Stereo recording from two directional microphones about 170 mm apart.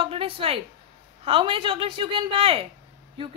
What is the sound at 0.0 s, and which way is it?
A woman's voice, 35° right (ahead or behind).